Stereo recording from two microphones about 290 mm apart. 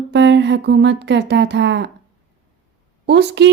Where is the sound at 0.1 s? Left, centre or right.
Right.